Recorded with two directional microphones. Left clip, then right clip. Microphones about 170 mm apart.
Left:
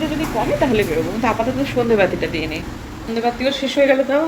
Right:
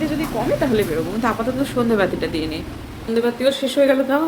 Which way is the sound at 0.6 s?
15° right (ahead or behind).